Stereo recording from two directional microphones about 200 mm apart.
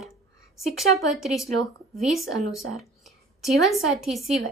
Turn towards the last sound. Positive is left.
turn(degrees=0)  # may be behind; listen again after turning